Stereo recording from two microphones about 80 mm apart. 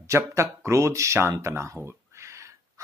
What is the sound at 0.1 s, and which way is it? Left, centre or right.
Speech, right.